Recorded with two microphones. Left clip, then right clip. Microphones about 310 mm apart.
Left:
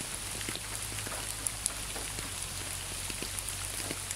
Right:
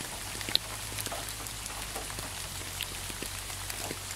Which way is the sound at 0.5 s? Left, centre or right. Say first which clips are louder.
Right 11 dB; right.